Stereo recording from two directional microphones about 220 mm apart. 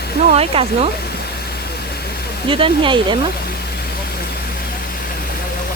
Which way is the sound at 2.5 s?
25° right (ahead or behind).